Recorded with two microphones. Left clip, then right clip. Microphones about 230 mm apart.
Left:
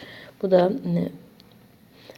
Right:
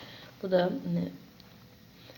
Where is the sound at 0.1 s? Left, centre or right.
Left.